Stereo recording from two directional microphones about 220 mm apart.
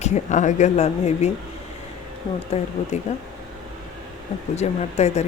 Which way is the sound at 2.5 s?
30° left (ahead or behind).